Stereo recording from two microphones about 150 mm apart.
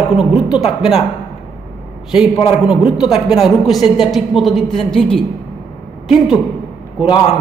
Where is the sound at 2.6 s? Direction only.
5° right (ahead or behind).